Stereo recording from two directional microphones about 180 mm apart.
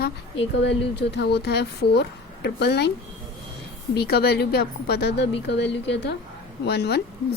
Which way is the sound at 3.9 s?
60° left (ahead or behind).